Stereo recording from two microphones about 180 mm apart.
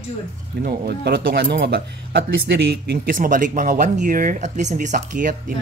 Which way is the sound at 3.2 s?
45° right (ahead or behind).